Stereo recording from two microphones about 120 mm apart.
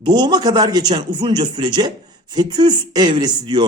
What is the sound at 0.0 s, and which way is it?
Speech, 40° right (ahead or behind).